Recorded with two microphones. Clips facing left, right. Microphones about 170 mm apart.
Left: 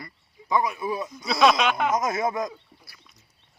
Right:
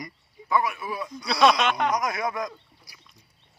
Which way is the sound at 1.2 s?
Centre (ahead or behind).